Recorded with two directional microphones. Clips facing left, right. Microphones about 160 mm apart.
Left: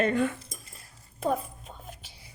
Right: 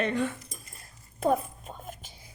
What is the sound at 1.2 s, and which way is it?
Whispering, 50° right (ahead or behind).